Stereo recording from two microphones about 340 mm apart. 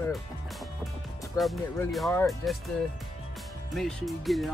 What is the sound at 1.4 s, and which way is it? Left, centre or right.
Speech, centre.